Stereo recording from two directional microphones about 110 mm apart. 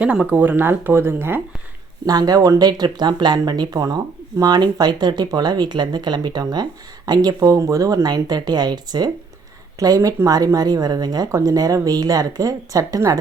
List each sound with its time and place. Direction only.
0.0 s speech: 10° right (ahead or behind)
2.0 s speech: 35° right (ahead or behind)